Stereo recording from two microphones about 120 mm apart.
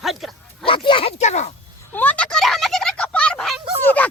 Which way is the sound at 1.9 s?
15° left (ahead or behind).